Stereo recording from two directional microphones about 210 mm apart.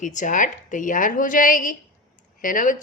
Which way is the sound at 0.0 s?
35° left (ahead or behind).